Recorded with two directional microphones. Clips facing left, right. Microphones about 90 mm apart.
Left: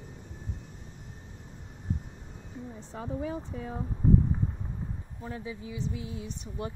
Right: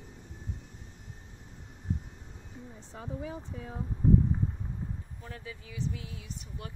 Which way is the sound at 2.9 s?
65° left (ahead or behind).